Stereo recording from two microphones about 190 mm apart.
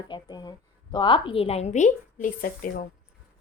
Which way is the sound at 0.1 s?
20° left (ahead or behind).